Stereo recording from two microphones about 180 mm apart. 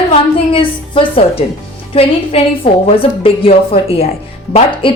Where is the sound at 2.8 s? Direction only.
30° left (ahead or behind).